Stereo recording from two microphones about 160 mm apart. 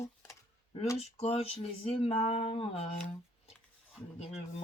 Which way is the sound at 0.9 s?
40° left (ahead or behind).